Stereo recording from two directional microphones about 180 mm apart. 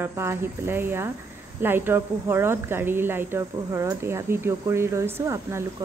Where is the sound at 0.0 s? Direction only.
15° right (ahead or behind).